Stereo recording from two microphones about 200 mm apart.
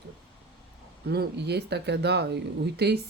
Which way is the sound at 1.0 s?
55° right (ahead or behind).